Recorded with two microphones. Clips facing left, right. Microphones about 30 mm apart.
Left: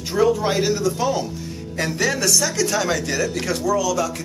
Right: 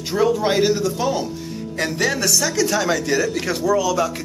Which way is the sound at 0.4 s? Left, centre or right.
Centre.